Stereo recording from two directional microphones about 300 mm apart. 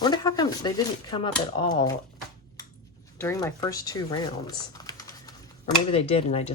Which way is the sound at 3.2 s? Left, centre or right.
Centre.